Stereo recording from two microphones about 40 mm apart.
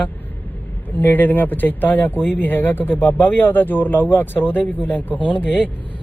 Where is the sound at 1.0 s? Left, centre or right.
Left.